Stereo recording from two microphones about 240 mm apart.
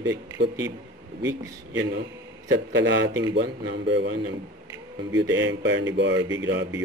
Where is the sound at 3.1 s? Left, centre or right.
Centre.